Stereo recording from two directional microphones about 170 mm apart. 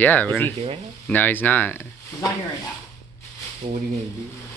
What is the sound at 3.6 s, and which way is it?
Speech, 30° right (ahead or behind).